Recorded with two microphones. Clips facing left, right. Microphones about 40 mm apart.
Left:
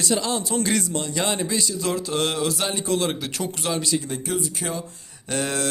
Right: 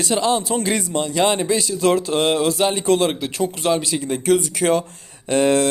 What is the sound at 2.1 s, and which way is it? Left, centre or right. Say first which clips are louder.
Mantra: right 6 dB; right.